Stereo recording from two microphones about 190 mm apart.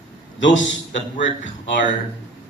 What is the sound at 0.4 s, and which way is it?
A man's voice, 80° left.